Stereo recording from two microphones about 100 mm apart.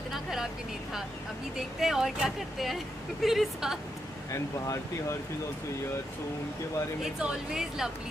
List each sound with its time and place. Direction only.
0.1 s vehicle: 5° right (ahead or behind)
1.8 s speech: 5° right (ahead or behind)
7.0 s speech: 5° right (ahead or behind)